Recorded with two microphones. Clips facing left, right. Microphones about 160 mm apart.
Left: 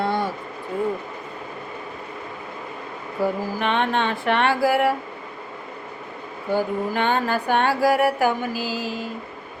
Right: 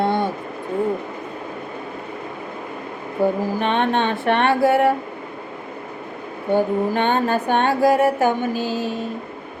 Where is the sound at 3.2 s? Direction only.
25° right (ahead or behind).